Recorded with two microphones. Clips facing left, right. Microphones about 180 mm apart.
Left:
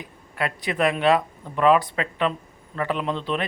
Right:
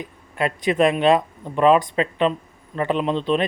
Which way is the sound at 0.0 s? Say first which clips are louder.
Right 4 dB; 20° right (ahead or behind).